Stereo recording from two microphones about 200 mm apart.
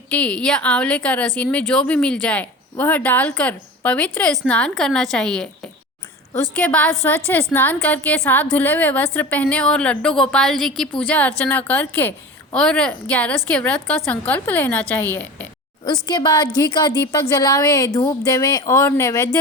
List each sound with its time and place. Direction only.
0.1 s a woman's voice: 5° left (ahead or behind)
16.0 s a woman's voice: 20° left (ahead or behind)